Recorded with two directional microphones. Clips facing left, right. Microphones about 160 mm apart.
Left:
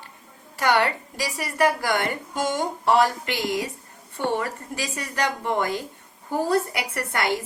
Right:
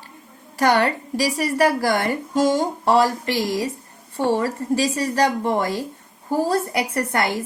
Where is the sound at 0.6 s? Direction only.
40° right (ahead or behind).